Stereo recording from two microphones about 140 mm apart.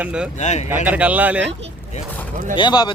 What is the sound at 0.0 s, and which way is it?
Speech, 5° right (ahead or behind).